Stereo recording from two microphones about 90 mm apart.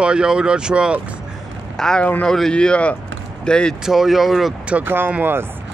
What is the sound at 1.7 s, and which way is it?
A man's voice, 5° left (ahead or behind).